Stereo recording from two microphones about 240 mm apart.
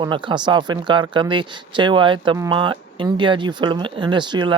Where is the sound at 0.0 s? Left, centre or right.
Centre.